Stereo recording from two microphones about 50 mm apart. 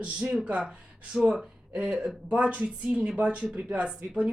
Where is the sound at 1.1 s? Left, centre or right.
Centre.